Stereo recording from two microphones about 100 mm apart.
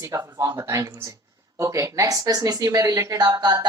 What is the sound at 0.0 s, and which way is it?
Speech, 30° right (ahead or behind).